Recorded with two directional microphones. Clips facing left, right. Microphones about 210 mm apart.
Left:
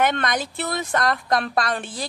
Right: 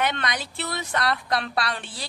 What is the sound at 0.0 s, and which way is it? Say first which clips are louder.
A woman's voice: left 5 dB; 50° left (ahead or behind).